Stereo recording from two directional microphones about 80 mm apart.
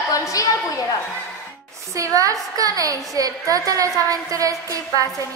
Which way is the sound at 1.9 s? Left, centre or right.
Right.